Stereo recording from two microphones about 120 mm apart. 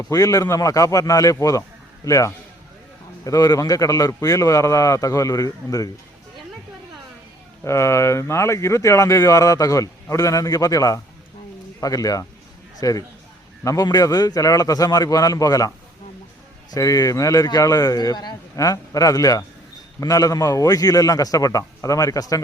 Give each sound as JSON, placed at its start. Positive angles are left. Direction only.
{"t": 0.0, "sound": "speech", "side_deg": 30}
{"t": 7.6, "sound": "speech", "side_deg": 25}
{"t": 16.7, "sound": "speech", "side_deg": 30}